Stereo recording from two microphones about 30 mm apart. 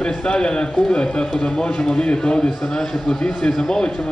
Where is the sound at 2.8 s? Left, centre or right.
Centre.